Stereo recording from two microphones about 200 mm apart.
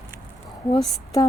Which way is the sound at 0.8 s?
15° left (ahead or behind).